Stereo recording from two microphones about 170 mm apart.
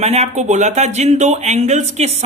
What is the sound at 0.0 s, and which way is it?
Speech, 40° right (ahead or behind).